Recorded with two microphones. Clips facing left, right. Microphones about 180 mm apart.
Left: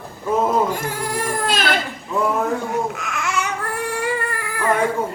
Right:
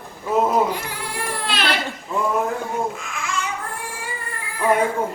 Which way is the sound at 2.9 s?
70° left (ahead or behind).